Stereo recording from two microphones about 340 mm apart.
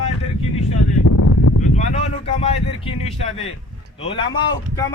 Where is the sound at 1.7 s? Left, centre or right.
Centre.